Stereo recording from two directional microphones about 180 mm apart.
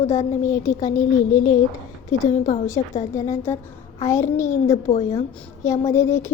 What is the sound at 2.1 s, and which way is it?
Speech, 20° left (ahead or behind).